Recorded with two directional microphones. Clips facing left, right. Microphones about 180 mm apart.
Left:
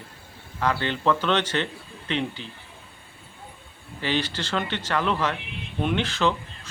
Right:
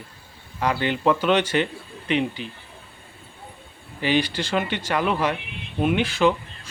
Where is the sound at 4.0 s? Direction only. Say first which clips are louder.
Right 5 dB; 15° right (ahead or behind).